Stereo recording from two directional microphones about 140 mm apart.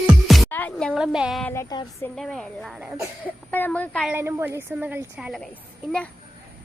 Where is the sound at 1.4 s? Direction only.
20° left (ahead or behind).